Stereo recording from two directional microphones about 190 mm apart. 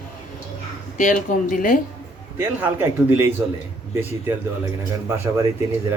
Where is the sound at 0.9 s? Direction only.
45° left (ahead or behind).